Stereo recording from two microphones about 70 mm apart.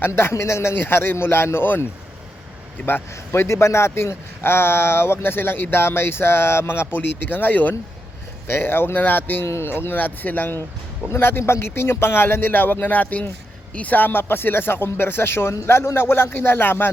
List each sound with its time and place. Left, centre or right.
0.1 s a man's voice: left